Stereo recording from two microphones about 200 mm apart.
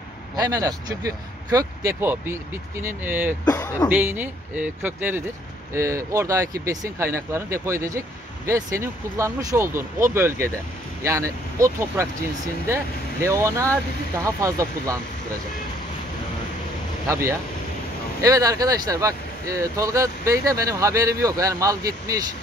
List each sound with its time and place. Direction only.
0.4 s speech: 15° right (ahead or behind)
3.4 s speech: 20° left (ahead or behind)
3.9 s speech: 10° right (ahead or behind)
17.1 s speech: 15° right (ahead or behind)